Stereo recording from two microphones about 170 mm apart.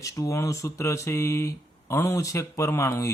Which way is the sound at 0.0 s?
20° left (ahead or behind).